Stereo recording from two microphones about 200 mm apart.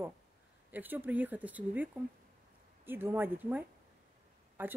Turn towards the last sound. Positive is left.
turn(degrees=-10)  # may be behind; listen again after turning